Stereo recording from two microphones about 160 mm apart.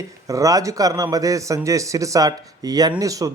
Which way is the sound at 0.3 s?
20° right (ahead or behind).